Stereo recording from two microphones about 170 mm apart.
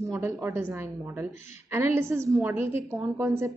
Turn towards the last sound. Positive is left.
turn(degrees=-15)  # may be behind; listen again after turning